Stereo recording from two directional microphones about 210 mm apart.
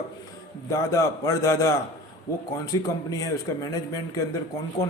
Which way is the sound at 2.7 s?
15° left (ahead or behind).